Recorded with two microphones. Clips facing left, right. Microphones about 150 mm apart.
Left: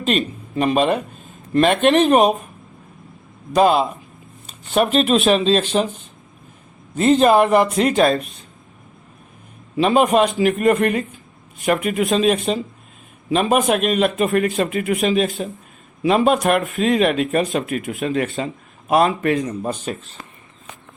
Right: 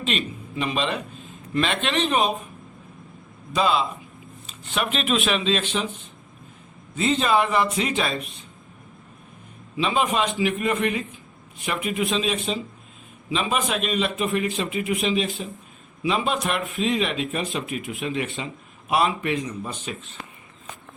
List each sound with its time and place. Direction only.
0.0 s speech: 45° left (ahead or behind)
3.5 s speech: 50° left (ahead or behind)
6.9 s speech: 50° left (ahead or behind)
9.7 s speech: 50° left (ahead or behind)